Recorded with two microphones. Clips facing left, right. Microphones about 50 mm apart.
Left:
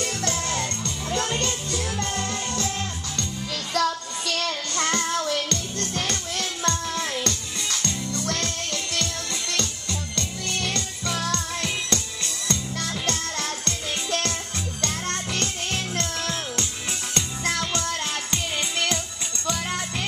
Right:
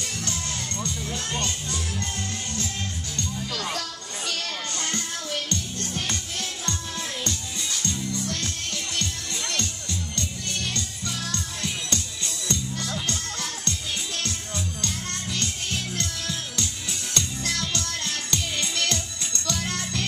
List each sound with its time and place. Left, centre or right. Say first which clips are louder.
0.0 s music: left 5 dB; left
1.1 s music: left 7 dB; left
3.7 s music: left 9 dB; left
5.5 s music: left 2 dB; left
6.3 s music: left 5 dB; left
10.7 s music: left 4 dB; left
15.3 s music: left 2 dB; left
17.1 s music: left 2 dB; left